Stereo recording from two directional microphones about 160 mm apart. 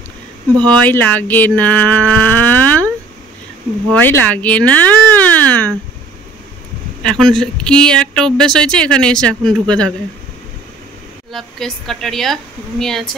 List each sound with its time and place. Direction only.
0.7 s a sound: 10° left (ahead or behind)
3.9 s speech: 10° left (ahead or behind)
7.0 s speech: 5° left (ahead or behind)
11.3 s speech: centre (ahead or behind)